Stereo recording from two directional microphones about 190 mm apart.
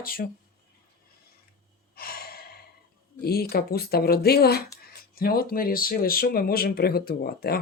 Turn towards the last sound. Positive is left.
turn(degrees=55)  # may be behind; listen again after turning